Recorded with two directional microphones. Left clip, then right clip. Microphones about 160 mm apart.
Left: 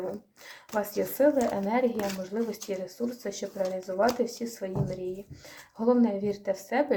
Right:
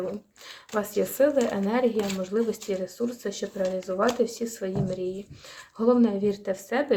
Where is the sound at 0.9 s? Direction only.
30° right (ahead or behind).